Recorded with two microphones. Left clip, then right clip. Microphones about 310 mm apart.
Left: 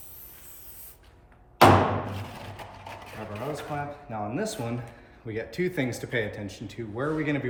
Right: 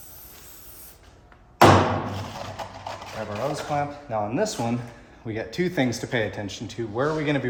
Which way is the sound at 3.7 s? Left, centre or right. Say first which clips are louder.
Right 7 dB; centre.